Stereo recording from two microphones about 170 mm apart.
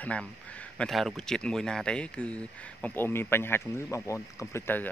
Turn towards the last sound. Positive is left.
turn(degrees=15)  # may be behind; listen again after turning